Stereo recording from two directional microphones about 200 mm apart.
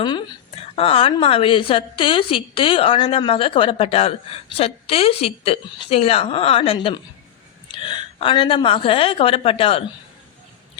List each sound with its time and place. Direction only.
0.0 s a woman's voice: 25° left (ahead or behind)